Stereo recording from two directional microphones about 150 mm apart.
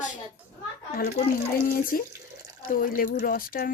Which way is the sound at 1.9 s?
75° left (ahead or behind).